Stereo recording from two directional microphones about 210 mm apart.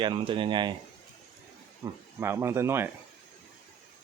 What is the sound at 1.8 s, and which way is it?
Speech, 10° right (ahead or behind).